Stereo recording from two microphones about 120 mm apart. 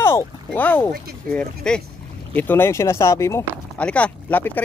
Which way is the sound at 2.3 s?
15° left (ahead or behind).